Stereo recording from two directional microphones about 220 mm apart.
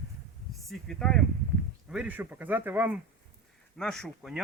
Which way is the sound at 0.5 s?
Centre (ahead or behind).